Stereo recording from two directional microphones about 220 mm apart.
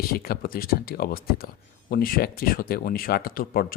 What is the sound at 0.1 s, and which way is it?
Speech, 45° left (ahead or behind).